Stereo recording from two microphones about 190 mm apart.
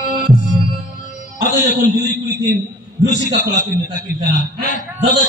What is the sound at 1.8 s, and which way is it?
A man's voice, 45° left (ahead or behind).